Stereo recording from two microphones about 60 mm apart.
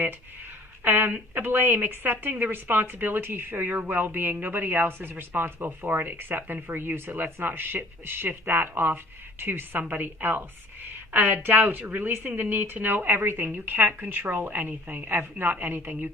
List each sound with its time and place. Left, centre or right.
0.9 s a woman's voice: right